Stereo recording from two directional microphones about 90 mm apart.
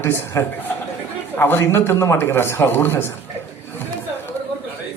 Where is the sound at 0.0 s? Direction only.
30° left (ahead or behind).